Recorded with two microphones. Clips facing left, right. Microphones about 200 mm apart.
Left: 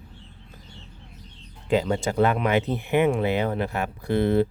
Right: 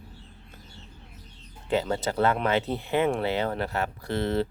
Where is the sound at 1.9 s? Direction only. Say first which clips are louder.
Left 3 dB; 15° left (ahead or behind).